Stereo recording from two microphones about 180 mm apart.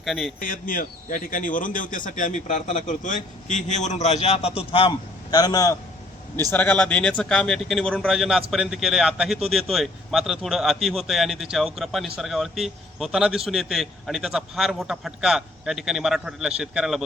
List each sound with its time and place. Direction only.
0.0 s a man's voice: centre (ahead or behind)
0.3 s a man's voice: 50° left (ahead or behind); by 5.7 s 20° left (ahead or behind)
6.5 s a man's voice: 10° left (ahead or behind)